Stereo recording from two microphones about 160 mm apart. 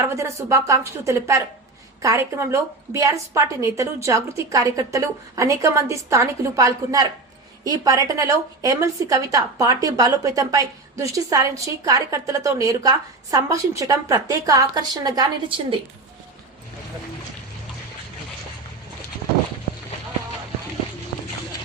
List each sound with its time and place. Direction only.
0.2 s a woman's voice: 20° right (ahead or behind)